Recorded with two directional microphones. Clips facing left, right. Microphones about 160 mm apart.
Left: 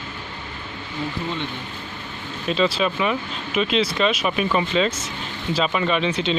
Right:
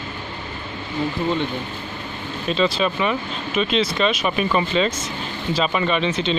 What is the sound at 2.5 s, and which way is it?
Speech, 5° left (ahead or behind).